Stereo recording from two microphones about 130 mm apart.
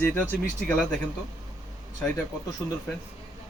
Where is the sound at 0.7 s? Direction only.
5° left (ahead or behind).